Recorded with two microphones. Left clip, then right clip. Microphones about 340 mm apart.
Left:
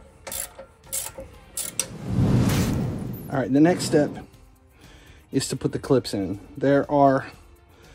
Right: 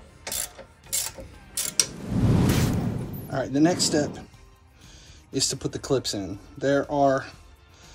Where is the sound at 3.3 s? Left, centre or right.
Left.